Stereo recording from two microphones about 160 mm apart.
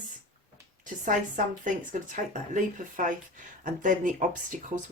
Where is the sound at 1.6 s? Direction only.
55° right (ahead or behind).